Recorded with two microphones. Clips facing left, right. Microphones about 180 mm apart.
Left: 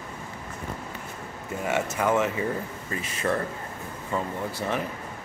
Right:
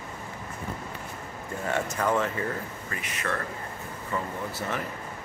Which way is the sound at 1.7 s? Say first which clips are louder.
Left 2 dB; 10° left (ahead or behind).